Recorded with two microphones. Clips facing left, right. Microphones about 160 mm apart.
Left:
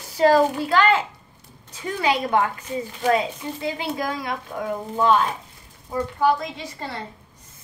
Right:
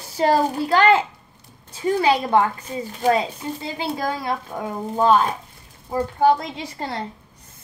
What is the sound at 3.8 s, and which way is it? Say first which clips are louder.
A woman's voice: right 2 dB; 30° right (ahead or behind).